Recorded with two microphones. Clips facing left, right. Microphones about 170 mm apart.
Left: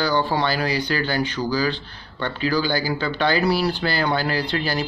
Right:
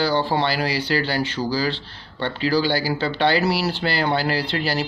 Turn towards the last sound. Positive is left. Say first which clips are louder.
# even
turn(degrees=-30)  # may be behind; listen again after turning